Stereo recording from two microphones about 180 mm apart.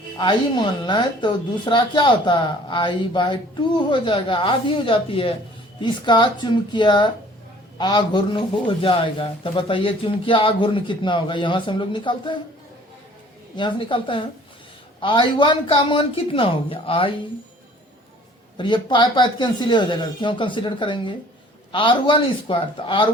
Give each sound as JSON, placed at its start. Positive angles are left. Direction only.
{"t": 0.2, "sound": "a man's voice", "side_deg": 25}
{"t": 13.6, "sound": "a man's voice", "side_deg": 25}
{"t": 18.5, "sound": "a man's voice", "side_deg": 25}